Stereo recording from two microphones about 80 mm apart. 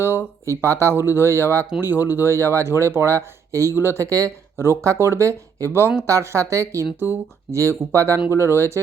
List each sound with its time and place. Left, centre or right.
0.4 s speech: right